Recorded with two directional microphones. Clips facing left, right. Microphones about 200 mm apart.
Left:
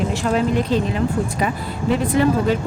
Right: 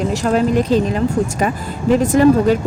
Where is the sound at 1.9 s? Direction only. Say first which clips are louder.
Right 6 dB; 45° right (ahead or behind).